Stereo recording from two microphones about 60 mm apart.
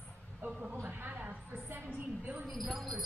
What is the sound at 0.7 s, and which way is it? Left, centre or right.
Speech, right.